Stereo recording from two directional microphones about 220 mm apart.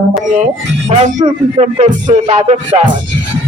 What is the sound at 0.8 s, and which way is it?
Speech, 30° right (ahead or behind).